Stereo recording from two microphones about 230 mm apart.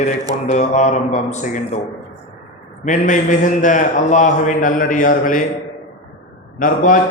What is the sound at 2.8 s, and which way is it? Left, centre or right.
A man's voice, left.